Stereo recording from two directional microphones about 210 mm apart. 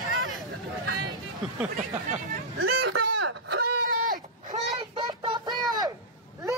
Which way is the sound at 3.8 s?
40° right (ahead or behind).